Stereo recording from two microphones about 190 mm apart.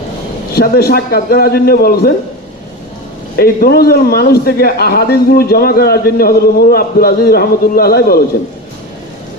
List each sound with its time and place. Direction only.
0.5 s a man's voice: 55° left (ahead or behind)
3.3 s a man's voice: 55° left (ahead or behind)